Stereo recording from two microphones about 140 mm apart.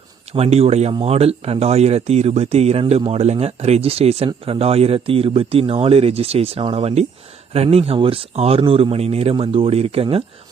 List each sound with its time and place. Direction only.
0.3 s speech: 45° right (ahead or behind)